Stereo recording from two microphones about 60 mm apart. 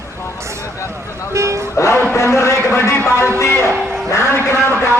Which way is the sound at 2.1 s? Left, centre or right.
Left.